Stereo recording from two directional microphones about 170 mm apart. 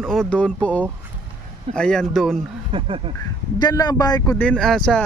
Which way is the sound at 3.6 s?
25° left (ahead or behind).